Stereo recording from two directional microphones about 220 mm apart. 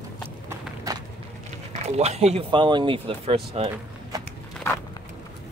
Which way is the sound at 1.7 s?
30° right (ahead or behind).